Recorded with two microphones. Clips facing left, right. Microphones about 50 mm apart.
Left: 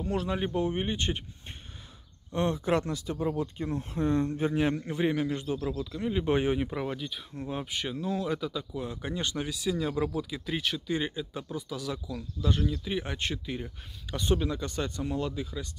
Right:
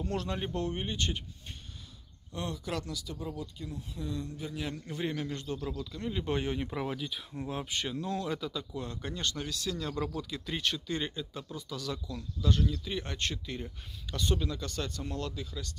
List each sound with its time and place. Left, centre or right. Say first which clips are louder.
0.0 s speech: left 4 dB; centre; by 1.2 s left
2.3 s speech: left 9 dB; left; by 5.6 s centre
5.6 s speech: left 5 dB; left
5.9 s speech: left 7 dB; centre
6.7 s speech: left 2 dB; centre